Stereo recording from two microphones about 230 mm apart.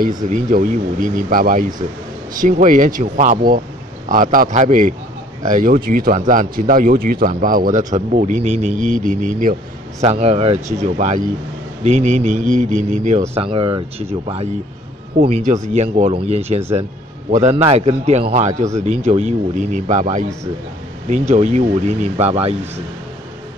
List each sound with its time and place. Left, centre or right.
0.2 s speech: right